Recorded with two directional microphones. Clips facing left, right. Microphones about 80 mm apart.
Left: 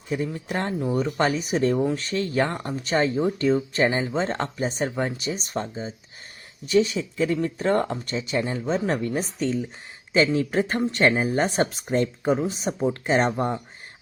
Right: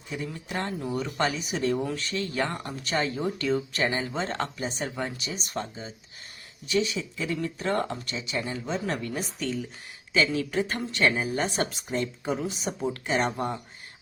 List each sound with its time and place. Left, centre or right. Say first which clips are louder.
0.1 s speech: left 6 dB; left
1.7 s speech: left 5 dB; left
2.0 s speech: left 5 dB; left
3.2 s speech: left 6 dB; left
3.4 s speech: left 5 dB; left